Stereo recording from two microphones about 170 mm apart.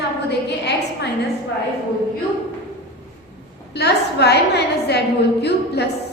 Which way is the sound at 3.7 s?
75° left (ahead or behind).